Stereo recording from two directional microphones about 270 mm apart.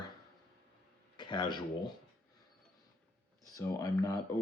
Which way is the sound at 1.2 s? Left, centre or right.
Centre.